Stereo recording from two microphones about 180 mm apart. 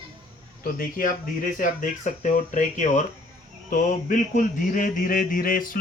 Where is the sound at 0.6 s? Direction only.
50° left (ahead or behind).